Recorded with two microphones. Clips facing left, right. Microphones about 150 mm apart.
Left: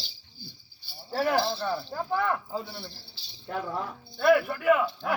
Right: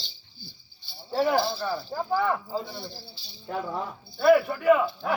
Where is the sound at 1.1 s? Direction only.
Centre (ahead or behind).